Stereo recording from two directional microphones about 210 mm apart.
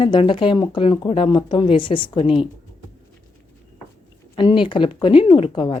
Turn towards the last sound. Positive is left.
turn(degrees=25)  # may be behind; listen again after turning